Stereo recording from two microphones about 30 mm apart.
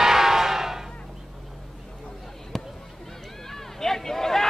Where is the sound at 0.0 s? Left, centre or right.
Centre.